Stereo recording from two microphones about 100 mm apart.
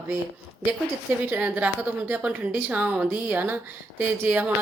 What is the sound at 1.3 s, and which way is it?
A woman's voice, 20° right (ahead or behind).